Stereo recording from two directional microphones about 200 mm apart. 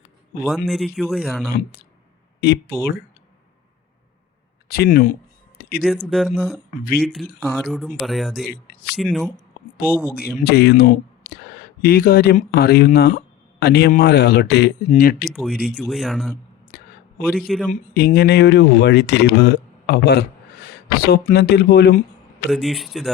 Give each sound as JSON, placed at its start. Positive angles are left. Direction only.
{"t": 0.4, "sound": "speech", "side_deg": 0}
{"t": 2.4, "sound": "speech", "side_deg": 55}
{"t": 4.7, "sound": "speech", "side_deg": 50}
{"t": 5.8, "sound": "speech", "side_deg": 0}
{"t": 9.8, "sound": "speech", "side_deg": 50}
{"t": 14.8, "sound": "speech", "side_deg": 40}
{"t": 15.2, "sound": "speech", "side_deg": 0}
{"t": 16.7, "sound": "a sound", "side_deg": 50}
{"t": 17.7, "sound": "speech", "side_deg": 50}
{"t": 22.4, "sound": "speech", "side_deg": 0}